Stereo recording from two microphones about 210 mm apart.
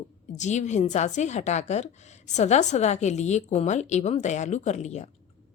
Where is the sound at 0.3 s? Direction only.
35° left (ahead or behind).